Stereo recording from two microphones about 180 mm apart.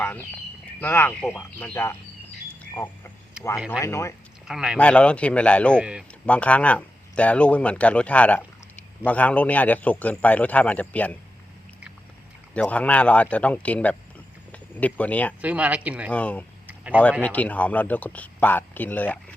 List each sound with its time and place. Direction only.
0.0 s a sound: 10° left (ahead or behind)
0.8 s a man's voice: 10° left (ahead or behind)
4.4 s speech: 5° right (ahead or behind)
4.8 s a man's voice: 5° left (ahead or behind)
5.8 s speech: 5° right (ahead or behind)
6.2 s a man's voice: 5° left (ahead or behind)
12.5 s a man's voice: 5° left (ahead or behind)
15.4 s speech: 10° right (ahead or behind)
16.1 s a man's voice: 5° left (ahead or behind)
16.6 s a sound: 10° right (ahead or behind)
17.0 s a man's voice: 5° left (ahead or behind)